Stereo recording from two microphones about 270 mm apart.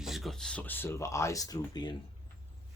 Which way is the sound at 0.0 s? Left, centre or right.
Centre.